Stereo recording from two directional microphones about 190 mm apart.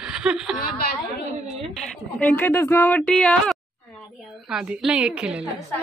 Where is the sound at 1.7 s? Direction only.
5° left (ahead or behind).